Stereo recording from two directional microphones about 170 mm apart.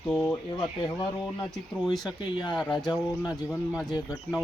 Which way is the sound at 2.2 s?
30° left (ahead or behind).